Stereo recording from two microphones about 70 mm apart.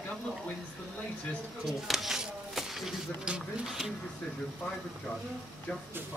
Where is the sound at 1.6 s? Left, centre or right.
Centre.